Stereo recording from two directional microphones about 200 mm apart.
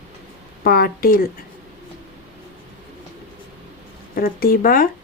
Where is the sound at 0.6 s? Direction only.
50° left (ahead or behind).